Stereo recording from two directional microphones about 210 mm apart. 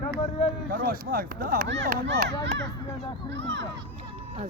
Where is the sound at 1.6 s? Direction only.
55° right (ahead or behind).